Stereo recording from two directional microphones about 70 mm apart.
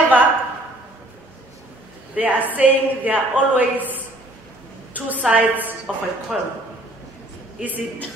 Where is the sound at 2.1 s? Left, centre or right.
Right.